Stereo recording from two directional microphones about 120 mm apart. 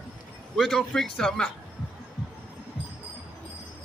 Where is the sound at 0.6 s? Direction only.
5° left (ahead or behind).